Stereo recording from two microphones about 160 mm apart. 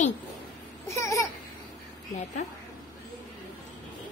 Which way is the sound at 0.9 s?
20° left (ahead or behind).